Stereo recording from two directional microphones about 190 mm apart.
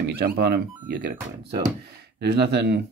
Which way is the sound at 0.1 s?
55° right (ahead or behind).